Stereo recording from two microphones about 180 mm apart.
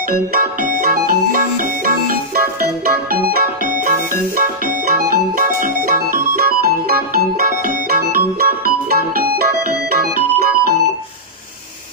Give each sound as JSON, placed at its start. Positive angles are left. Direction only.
{"t": 0.1, "sound": "music", "side_deg": -55}